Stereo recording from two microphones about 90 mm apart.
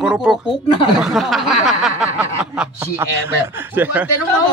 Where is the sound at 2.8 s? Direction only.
25° right (ahead or behind).